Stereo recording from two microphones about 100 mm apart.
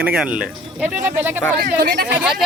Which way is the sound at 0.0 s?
10° right (ahead or behind).